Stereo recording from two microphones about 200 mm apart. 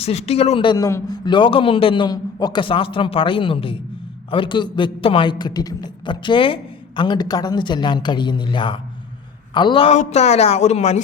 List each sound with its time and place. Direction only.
0.0 s a man's voice: 30° left (ahead or behind)